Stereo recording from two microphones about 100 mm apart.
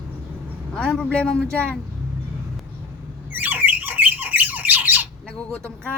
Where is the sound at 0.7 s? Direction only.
5° left (ahead or behind).